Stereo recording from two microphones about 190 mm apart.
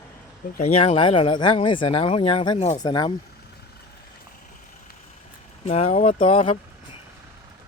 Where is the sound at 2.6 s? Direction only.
35° left (ahead or behind).